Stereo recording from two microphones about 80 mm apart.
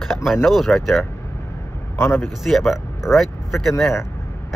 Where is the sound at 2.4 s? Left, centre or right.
Centre.